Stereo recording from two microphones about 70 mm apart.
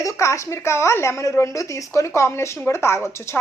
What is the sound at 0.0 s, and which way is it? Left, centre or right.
A woman's voice, left.